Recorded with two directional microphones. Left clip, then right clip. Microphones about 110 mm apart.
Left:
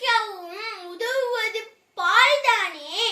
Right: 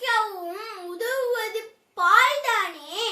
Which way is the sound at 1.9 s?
30° right (ahead or behind).